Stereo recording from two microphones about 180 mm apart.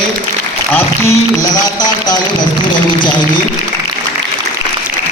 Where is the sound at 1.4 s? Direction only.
20° left (ahead or behind).